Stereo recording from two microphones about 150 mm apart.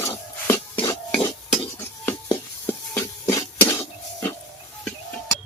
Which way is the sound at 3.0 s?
20° left (ahead or behind).